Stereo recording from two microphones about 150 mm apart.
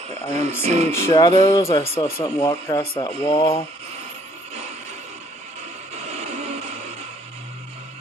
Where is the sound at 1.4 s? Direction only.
25° left (ahead or behind).